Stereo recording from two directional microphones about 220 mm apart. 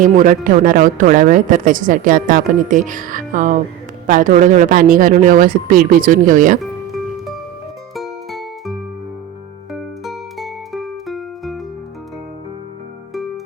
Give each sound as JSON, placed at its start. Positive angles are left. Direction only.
{"t": 0.0, "sound": "speech", "side_deg": -35}
{"t": 6.6, "sound": "music", "side_deg": 0}
{"t": 13.1, "sound": "music", "side_deg": 0}